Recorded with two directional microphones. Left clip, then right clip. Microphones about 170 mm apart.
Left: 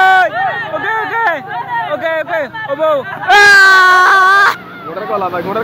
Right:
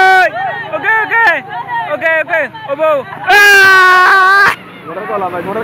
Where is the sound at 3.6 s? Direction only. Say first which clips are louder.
Right 1 dB; centre (ahead or behind).